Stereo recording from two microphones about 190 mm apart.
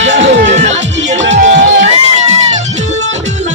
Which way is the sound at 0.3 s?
40° right (ahead or behind).